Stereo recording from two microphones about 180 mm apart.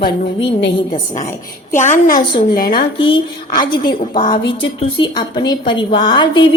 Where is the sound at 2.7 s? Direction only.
25° left (ahead or behind).